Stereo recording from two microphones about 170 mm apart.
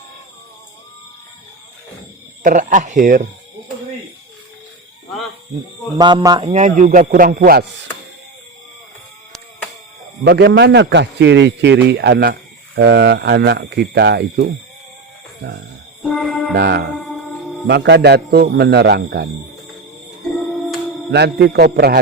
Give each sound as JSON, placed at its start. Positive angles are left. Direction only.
{"t": 2.4, "sound": "speech", "side_deg": -50}
{"t": 6.0, "sound": "mantra", "side_deg": -25}
{"t": 6.5, "sound": "speech", "side_deg": -45}
{"t": 10.2, "sound": "a man's voice", "side_deg": -85}
{"t": 16.0, "sound": "music", "side_deg": 0}
{"t": 16.6, "sound": "a man's voice", "side_deg": -75}
{"t": 17.7, "sound": "a man's voice", "side_deg": -85}
{"t": 21.1, "sound": "a man's voice", "side_deg": -75}